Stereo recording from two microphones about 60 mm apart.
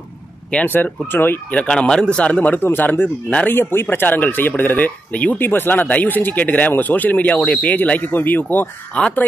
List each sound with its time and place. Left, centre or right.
0.7 s speech: left
1.6 s speech: centre
5.4 s speech: left
9.0 s speech: centre